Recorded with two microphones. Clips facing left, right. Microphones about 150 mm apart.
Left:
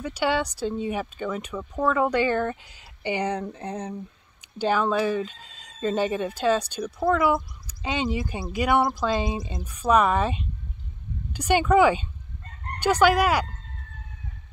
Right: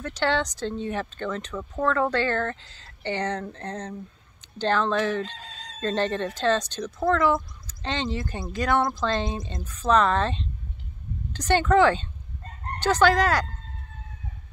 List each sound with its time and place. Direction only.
0.0 s speech: 10° left (ahead or behind)
5.3 s speech: 80° right
5.8 s speech: 10° left (ahead or behind)